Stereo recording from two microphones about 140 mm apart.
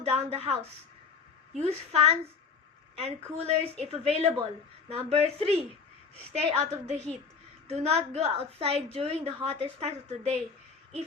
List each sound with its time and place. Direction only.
0.0 s a woman's voice: 50° right (ahead or behind)
3.4 s a woman's voice: 50° right (ahead or behind)